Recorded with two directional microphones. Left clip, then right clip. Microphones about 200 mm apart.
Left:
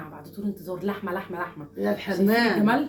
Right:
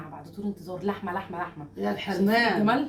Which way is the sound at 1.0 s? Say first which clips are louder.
Left 1 dB; centre (ahead or behind).